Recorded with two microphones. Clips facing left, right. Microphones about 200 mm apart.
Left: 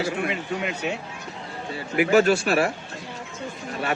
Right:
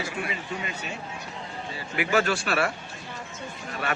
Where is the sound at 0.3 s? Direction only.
70° left (ahead or behind).